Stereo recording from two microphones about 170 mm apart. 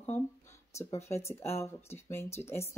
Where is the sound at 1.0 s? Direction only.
15° left (ahead or behind).